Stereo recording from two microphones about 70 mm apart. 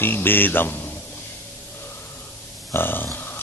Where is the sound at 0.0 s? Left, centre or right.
Left.